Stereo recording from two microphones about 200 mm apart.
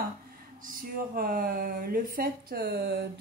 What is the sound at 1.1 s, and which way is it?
Speech, 45° right (ahead or behind).